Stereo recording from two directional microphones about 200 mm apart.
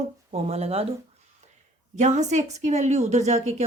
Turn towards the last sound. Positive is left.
turn(degrees=-35)  # may be behind; listen again after turning